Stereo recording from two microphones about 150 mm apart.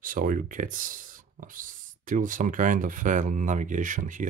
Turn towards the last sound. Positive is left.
turn(degrees=-60)  # may be behind; listen again after turning